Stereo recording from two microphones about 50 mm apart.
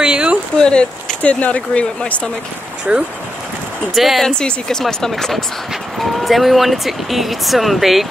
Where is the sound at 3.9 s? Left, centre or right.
Centre.